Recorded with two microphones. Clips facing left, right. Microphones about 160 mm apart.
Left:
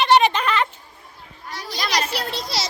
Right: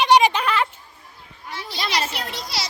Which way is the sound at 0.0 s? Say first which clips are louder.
Even; 10° right (ahead or behind).